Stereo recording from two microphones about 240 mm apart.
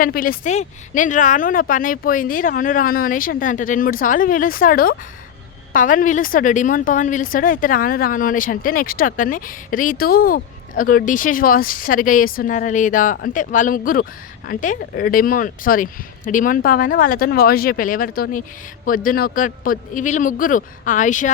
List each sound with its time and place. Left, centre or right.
0.0 s a woman's voice: left